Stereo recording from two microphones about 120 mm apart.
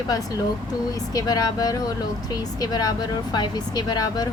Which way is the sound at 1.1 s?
30° left (ahead or behind).